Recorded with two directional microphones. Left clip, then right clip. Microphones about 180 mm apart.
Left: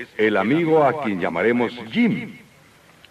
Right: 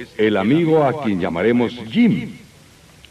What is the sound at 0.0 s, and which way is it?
A man's voice, 20° left (ahead or behind).